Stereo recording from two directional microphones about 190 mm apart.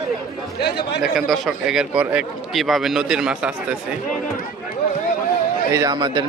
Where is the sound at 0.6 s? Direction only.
60° left (ahead or behind).